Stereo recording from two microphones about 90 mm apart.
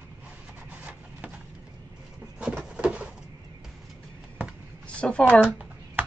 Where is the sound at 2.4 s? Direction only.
15° right (ahead or behind).